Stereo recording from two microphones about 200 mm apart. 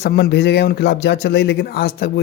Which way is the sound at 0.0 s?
55° left (ahead or behind).